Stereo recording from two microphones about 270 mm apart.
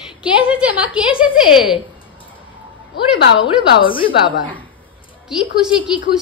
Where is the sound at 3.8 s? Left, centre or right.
Centre.